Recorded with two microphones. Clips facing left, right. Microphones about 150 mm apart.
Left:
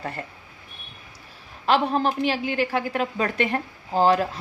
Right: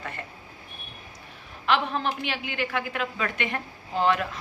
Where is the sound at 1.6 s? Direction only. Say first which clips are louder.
Left 4 dB; 35° left (ahead or behind).